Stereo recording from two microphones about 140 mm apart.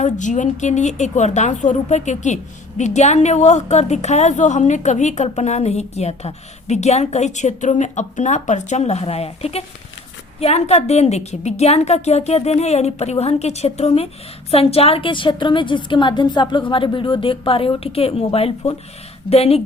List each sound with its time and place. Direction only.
0.0 s a woman's voice: 60° left (ahead or behind); by 19.6 s 45° left (ahead or behind)